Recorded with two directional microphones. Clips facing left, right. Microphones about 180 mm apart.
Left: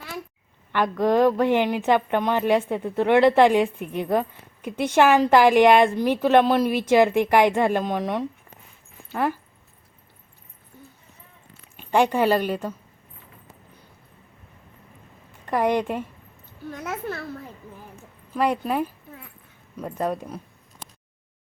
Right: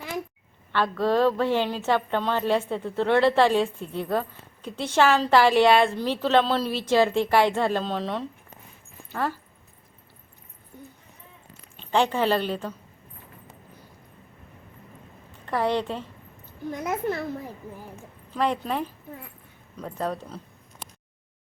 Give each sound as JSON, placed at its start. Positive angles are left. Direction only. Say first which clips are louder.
{"t": 0.7, "sound": "a woman's voice", "louder": "left 3 dB", "side_deg": 15}
{"t": 11.8, "sound": "a woman's voice", "louder": "left 3 dB", "side_deg": 10}
{"t": 15.4, "sound": "a woman's voice", "louder": "left 3 dB", "side_deg": 15}
{"t": 16.6, "sound": "a child's voice", "louder": "right 3 dB", "side_deg": -15}
{"t": 18.3, "sound": "a woman's voice", "louder": "left 3 dB", "side_deg": 10}